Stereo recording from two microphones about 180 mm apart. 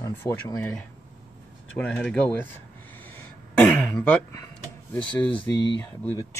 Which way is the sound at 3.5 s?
5° left (ahead or behind).